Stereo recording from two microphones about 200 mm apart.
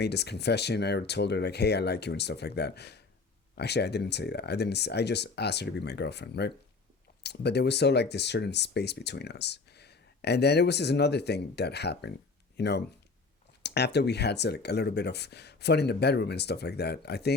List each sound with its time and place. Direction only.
0.0 s speech: 55° left (ahead or behind)